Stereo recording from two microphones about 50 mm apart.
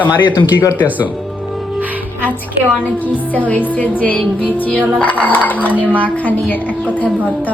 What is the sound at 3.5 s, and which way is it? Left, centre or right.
Speech, left.